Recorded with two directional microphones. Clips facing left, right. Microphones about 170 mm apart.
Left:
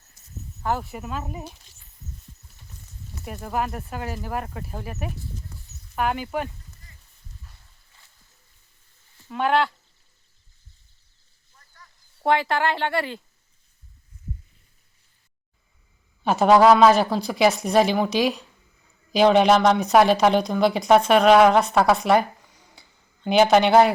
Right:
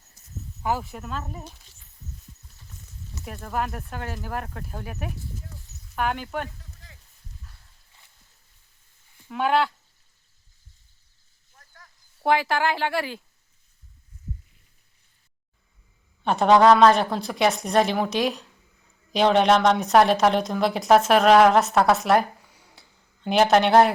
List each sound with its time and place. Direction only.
0.6 s a woman's voice: 5° right (ahead or behind)
3.2 s a woman's voice: 5° left (ahead or behind)
9.3 s a woman's voice: centre (ahead or behind)
11.5 s vehicle: 50° right (ahead or behind)
12.2 s a woman's voice: centre (ahead or behind)
16.2 s a woman's voice: 5° left (ahead or behind)